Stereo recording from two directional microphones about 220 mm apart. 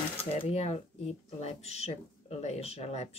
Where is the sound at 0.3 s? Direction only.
25° left (ahead or behind).